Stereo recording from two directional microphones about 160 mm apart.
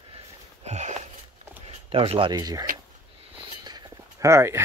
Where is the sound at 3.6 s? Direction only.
20° right (ahead or behind).